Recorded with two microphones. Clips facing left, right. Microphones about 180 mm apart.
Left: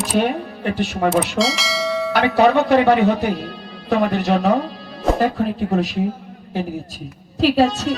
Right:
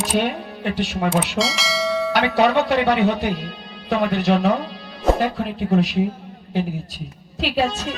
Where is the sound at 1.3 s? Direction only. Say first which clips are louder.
Left 2 dB; centre (ahead or behind).